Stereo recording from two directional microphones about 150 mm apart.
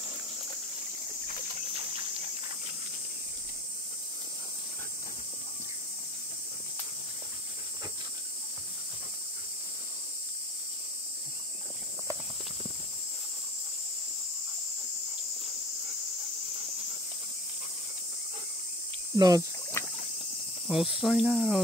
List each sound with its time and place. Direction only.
19.1 s speech: 25° right (ahead or behind)
19.8 s rowboat: 15° left (ahead or behind)
20.7 s cricket: centre (ahead or behind)